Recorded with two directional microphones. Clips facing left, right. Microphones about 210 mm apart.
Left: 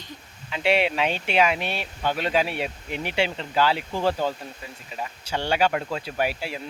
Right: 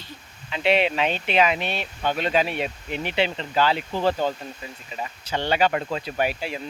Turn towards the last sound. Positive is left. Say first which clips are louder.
# right 1 dB
turn(degrees=5)  # may be behind; listen again after turning